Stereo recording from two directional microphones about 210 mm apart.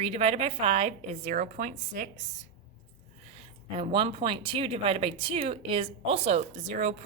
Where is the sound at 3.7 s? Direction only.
25° right (ahead or behind).